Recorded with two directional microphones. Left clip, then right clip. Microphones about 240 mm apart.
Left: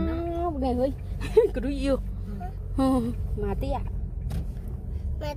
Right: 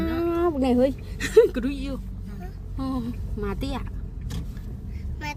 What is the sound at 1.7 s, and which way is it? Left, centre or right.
Speech, left.